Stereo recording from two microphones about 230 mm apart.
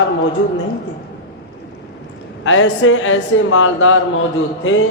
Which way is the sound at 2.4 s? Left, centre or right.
Left.